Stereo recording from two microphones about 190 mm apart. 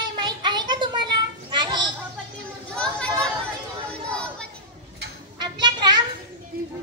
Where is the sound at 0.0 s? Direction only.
25° right (ahead or behind).